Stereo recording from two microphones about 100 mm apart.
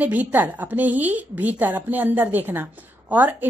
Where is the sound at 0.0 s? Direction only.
15° right (ahead or behind).